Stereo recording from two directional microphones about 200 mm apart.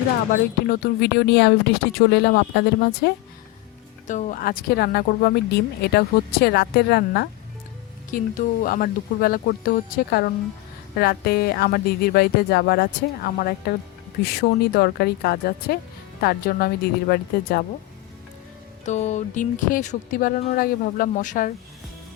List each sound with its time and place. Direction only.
0.7 s speech: 50° left (ahead or behind)
4.0 s speech: 40° left (ahead or behind)
18.9 s speech: 35° left (ahead or behind)